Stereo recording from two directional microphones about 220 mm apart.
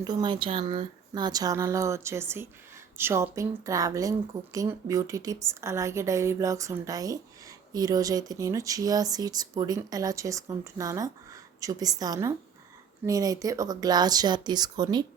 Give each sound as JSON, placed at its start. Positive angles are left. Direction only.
{"t": 0.0, "sound": "a woman's voice", "side_deg": -20}